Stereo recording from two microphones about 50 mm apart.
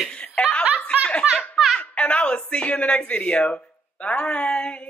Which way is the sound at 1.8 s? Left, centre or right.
Left.